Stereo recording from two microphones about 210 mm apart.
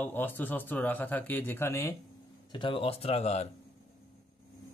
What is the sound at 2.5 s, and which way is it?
Speech, 25° left (ahead or behind).